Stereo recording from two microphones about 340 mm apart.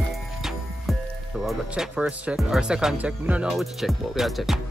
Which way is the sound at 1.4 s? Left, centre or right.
Centre.